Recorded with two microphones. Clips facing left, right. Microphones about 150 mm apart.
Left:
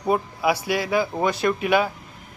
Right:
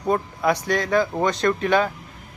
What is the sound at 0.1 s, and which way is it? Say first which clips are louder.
Speech: even; 5° left (ahead or behind).